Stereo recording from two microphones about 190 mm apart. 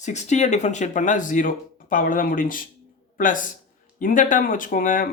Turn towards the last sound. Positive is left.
turn(degrees=45)  # may be behind; listen again after turning